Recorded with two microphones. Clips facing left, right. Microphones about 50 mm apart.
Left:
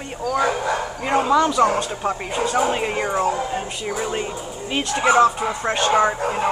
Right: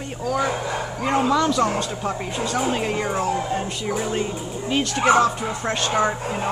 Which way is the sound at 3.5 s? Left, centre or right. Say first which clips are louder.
Right 1 dB; centre.